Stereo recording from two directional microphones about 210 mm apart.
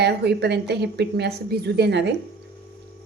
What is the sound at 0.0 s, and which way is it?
A woman's voice, 50° right (ahead or behind).